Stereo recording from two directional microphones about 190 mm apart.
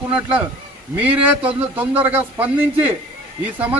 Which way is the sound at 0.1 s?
5° right (ahead or behind).